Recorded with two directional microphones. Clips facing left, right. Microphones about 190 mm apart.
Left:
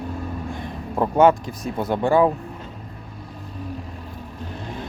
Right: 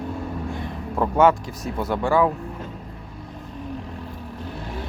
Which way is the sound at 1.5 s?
15° left (ahead or behind).